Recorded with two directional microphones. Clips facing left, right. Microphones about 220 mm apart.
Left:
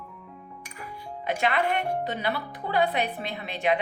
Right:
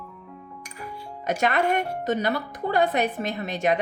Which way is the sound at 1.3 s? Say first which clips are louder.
Right 3 dB; 45° right (ahead or behind).